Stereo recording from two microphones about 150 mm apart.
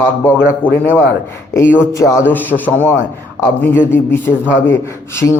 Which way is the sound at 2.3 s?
10° left (ahead or behind).